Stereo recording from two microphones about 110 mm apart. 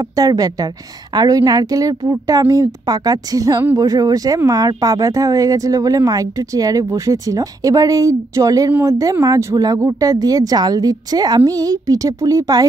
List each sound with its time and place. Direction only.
0.1 s speech: 35° right (ahead or behind)